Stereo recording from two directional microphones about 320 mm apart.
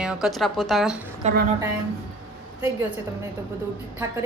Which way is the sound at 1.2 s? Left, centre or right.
Centre.